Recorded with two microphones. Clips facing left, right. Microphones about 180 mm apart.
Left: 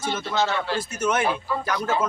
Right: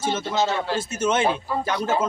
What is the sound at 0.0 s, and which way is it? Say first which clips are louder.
A man's voice: right 2 dB; 25° right (ahead or behind).